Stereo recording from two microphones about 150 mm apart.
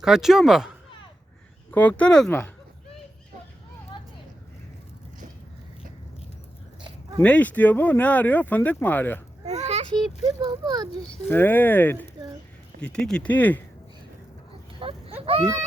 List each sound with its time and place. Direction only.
0.0 s speech: 5° right (ahead or behind)
1.7 s speech: 10° left (ahead or behind)
7.2 s speech: 10° left (ahead or behind)
9.5 s children playing: 50° right (ahead or behind)
10.4 s speech: 25° right (ahead or behind)
11.3 s speech: 15° left (ahead or behind)
14.8 s a sound: 35° right (ahead or behind)
15.3 s speech: 35° right (ahead or behind)